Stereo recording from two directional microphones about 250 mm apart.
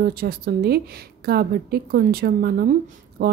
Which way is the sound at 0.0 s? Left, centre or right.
Right.